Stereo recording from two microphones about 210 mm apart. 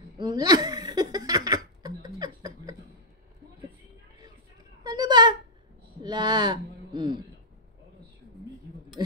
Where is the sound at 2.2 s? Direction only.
15° right (ahead or behind).